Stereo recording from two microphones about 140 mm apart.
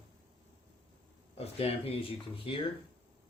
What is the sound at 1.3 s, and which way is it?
Speech, 45° left (ahead or behind).